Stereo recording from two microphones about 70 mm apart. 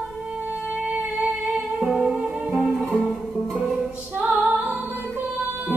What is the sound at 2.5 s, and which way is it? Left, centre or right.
Music, centre.